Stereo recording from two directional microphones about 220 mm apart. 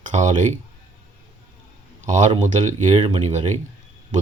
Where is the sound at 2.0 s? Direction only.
35° right (ahead or behind).